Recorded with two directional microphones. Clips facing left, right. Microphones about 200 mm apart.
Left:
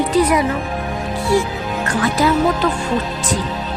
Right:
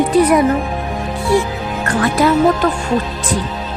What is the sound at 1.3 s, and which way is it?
Speech, 60° right (ahead or behind).